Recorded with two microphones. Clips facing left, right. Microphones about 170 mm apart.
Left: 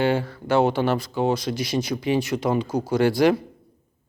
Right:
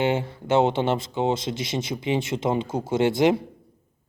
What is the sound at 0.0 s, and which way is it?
Speech, 20° right (ahead or behind).